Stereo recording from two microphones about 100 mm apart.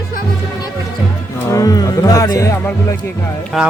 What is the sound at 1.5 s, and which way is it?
Speech, 35° left (ahead or behind).